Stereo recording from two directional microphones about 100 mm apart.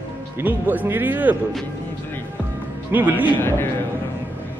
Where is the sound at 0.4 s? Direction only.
15° right (ahead or behind).